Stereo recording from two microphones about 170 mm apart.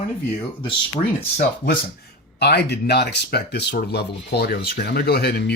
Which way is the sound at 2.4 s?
75° left (ahead or behind).